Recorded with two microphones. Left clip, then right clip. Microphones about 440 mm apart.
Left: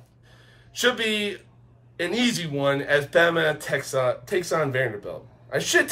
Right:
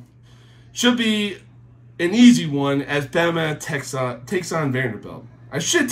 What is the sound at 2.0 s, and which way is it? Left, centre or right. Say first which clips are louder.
Speech: right 9 dB; centre.